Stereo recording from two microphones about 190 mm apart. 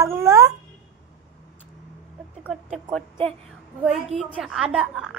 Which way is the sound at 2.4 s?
Centre (ahead or behind).